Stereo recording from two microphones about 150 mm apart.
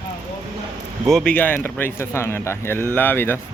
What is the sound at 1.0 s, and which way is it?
Speech, 5° left (ahead or behind).